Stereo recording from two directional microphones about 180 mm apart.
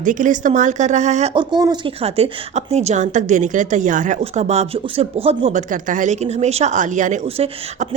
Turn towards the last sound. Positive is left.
turn(degrees=-35)  # may be behind; listen again after turning